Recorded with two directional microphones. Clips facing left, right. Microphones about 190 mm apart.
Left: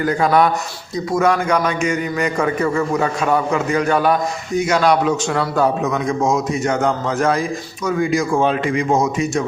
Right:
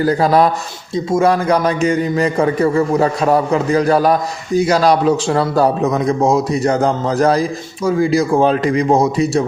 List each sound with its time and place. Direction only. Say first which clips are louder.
0.0 s a man's voice: right 3 dB; 35° right (ahead or behind)